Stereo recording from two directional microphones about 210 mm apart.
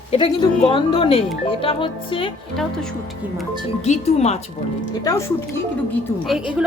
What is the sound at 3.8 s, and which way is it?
Speech, 30° left (ahead or behind).